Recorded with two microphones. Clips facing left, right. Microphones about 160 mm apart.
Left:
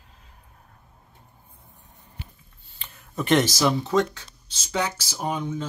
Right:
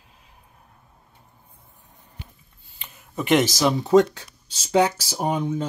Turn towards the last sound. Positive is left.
turn(degrees=-40)  # may be behind; listen again after turning